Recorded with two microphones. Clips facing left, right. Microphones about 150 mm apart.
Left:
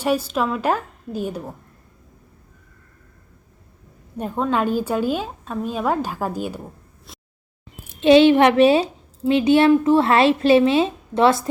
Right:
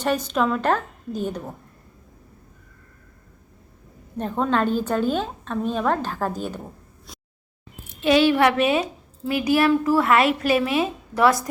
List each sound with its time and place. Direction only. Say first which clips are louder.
0.0 s a woman's voice: left 1 dB; 5° left (ahead or behind)
4.2 s a woman's voice: left 1 dB; 5° left (ahead or behind)
7.1 s a sound: even; centre (ahead or behind)
8.0 s a woman's voice: left 5 dB; 25° left (ahead or behind)